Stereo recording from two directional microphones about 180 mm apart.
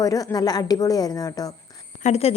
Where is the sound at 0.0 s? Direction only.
20° left (ahead or behind).